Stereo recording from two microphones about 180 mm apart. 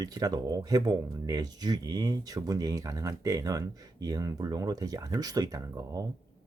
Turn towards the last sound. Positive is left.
turn(degrees=-20)  # may be behind; listen again after turning